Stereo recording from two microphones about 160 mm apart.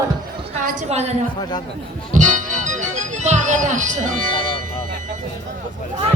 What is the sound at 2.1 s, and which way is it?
Music, 50° right (ahead or behind).